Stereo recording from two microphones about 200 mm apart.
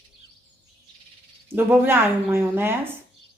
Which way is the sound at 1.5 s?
10° right (ahead or behind).